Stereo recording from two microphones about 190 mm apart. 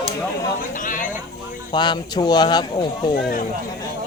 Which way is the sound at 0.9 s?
45° left (ahead or behind).